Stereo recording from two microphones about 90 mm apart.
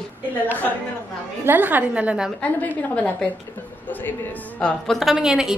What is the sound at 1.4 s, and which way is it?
Speech, 20° right (ahead or behind).